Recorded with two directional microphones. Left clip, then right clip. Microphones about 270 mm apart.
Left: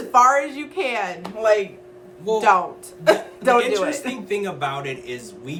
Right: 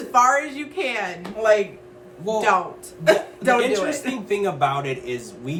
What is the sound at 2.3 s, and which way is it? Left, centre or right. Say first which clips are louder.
Speech: left 2 dB; centre.